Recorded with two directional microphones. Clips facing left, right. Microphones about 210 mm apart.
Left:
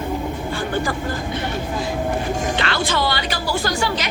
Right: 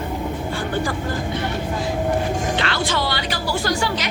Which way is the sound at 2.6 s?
50° left (ahead or behind).